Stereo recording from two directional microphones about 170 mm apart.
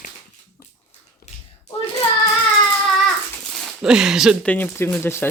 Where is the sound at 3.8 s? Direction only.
5° right (ahead or behind).